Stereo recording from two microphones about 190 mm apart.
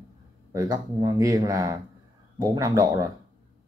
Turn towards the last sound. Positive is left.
turn(degrees=-20)  # may be behind; listen again after turning